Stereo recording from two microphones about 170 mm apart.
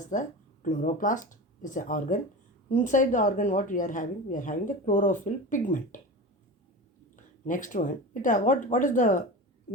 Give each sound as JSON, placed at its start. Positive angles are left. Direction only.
{"t": 0.0, "sound": "a woman's voice", "side_deg": 45}
{"t": 7.4, "sound": "a woman's voice", "side_deg": 50}